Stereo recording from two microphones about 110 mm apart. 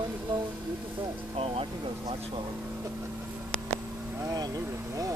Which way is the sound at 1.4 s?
60° right (ahead or behind).